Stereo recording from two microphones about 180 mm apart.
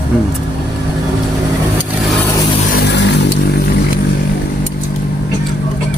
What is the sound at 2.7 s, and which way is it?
Vehicle, 70° left (ahead or behind).